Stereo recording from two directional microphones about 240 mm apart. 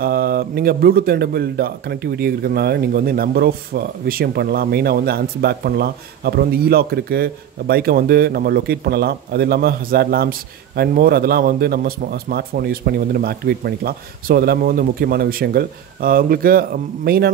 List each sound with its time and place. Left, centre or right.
0.0 s speech: right